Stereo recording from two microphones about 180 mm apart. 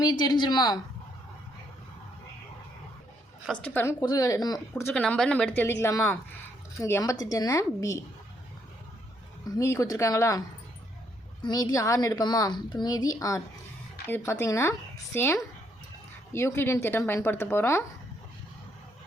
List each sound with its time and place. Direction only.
0.0 s a woman's voice: 20° left (ahead or behind)
3.4 s speech: 5° left (ahead or behind)
4.0 s a woman's voice: 20° left (ahead or behind)
9.6 s speech: 15° left (ahead or behind)
11.4 s a woman's voice: 20° left (ahead or behind)